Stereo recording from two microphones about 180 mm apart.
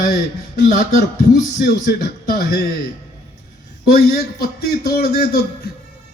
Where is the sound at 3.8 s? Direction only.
60° left (ahead or behind).